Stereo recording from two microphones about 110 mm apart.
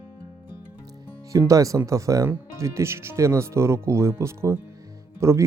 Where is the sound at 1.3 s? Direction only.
30° right (ahead or behind).